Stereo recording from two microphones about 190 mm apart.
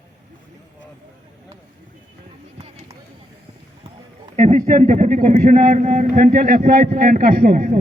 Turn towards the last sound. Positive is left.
turn(degrees=-50)  # may be behind; listen again after turning